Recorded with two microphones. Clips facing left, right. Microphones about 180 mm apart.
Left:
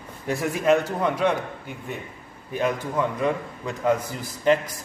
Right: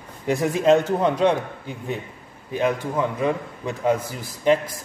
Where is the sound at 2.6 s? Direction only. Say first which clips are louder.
Right 2 dB; 20° right (ahead or behind).